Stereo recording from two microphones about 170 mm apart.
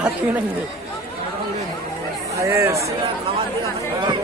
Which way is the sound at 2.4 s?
15° right (ahead or behind).